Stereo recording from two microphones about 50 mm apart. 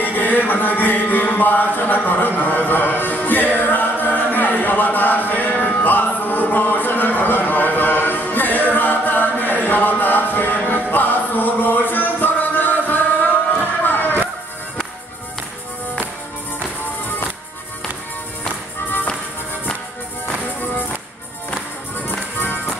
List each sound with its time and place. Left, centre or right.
0.0 s music: left